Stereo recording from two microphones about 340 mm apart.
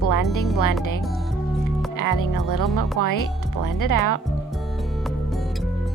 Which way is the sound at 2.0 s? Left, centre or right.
Left.